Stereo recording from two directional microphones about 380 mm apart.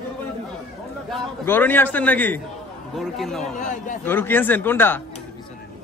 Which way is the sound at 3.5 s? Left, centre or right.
Centre.